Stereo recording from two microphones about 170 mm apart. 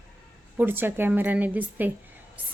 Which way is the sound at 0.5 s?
10° right (ahead or behind).